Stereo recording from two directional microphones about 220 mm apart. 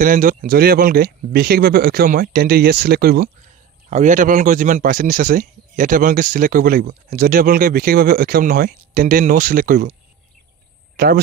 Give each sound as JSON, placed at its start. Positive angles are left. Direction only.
{"t": 0.0, "sound": "speech", "side_deg": -40}
{"t": 11.0, "sound": "speech", "side_deg": -45}